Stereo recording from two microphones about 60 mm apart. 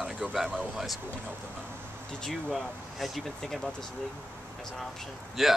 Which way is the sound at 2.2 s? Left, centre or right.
Centre.